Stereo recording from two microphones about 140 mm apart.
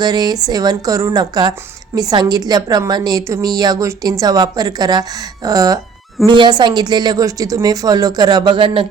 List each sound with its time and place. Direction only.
0.0 s a woman's voice: 30° right (ahead or behind)